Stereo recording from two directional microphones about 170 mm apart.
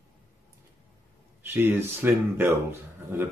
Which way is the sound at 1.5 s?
10° right (ahead or behind).